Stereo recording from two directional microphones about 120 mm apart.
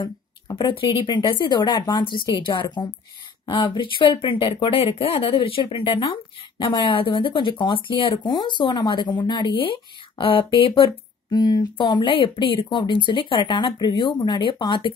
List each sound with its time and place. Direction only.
0.0 s speech: 40° left (ahead or behind)